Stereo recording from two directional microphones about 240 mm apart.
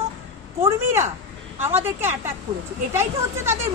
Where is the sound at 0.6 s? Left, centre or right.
Centre.